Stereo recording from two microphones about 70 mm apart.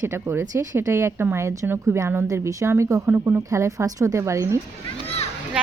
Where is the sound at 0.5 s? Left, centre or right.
Right.